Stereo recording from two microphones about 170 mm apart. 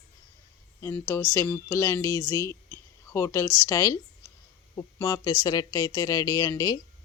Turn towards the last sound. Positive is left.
turn(degrees=20)  # may be behind; listen again after turning